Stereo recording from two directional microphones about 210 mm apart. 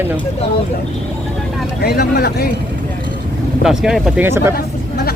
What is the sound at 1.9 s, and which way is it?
Speech, 50° left (ahead or behind).